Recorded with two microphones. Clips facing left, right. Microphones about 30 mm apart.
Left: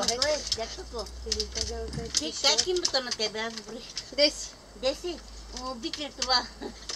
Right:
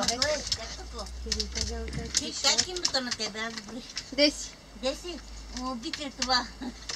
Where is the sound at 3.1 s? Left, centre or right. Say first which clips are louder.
Left 3 dB; centre.